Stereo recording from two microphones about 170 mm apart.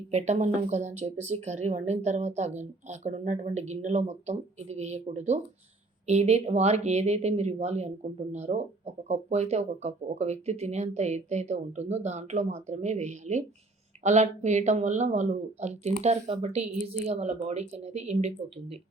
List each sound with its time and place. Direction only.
0.1 s speech: 40° right (ahead or behind)